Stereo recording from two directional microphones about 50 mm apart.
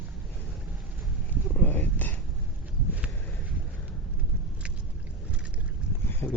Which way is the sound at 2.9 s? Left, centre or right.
Right.